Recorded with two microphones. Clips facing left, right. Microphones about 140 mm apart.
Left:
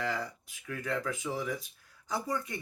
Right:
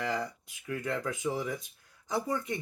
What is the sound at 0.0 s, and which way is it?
Speech, 20° right (ahead or behind).